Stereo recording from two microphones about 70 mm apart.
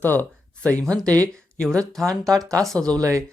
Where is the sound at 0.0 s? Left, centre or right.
Left.